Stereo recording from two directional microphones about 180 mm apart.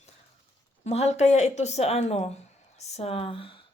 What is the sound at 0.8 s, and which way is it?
A woman's voice, 40° left (ahead or behind).